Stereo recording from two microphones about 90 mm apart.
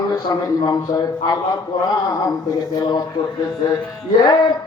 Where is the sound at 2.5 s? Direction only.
45° left (ahead or behind).